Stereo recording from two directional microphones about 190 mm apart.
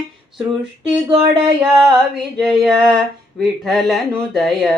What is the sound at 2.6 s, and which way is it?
Speech, centre (ahead or behind).